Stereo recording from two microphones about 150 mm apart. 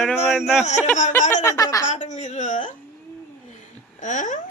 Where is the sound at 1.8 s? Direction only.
55° left (ahead or behind).